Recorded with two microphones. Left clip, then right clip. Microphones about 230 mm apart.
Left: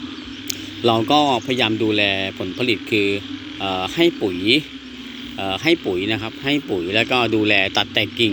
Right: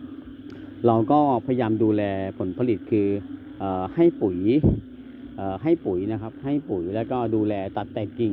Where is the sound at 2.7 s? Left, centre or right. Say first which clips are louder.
Left 5 dB; right.